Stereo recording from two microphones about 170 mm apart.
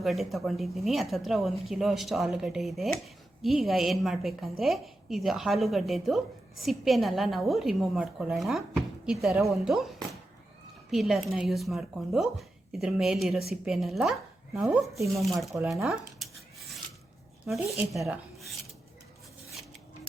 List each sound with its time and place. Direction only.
0.0 s a woman's voice: centre (ahead or behind)
14.6 s speech: 15° right (ahead or behind)
15.6 s a sound: centre (ahead or behind)
17.9 s speech: centre (ahead or behind)